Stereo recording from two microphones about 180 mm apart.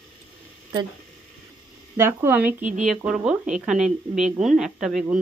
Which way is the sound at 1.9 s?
10° right (ahead or behind).